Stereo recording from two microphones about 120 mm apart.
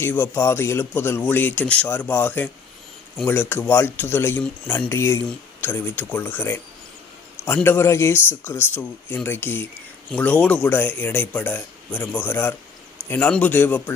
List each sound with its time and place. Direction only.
0.0 s speech: 20° left (ahead or behind)